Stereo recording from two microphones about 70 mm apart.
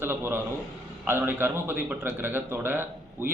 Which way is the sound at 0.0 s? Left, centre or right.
Right.